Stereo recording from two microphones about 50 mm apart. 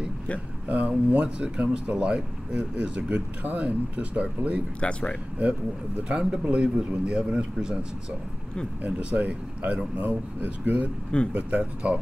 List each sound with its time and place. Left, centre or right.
0.7 s speech: right
4.7 s speech: left
6.0 s speech: centre
8.8 s speech: right